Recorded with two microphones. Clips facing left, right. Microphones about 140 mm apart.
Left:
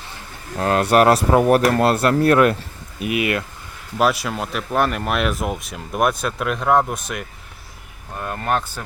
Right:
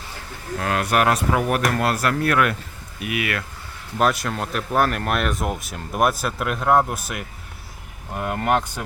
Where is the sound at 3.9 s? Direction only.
5° left (ahead or behind).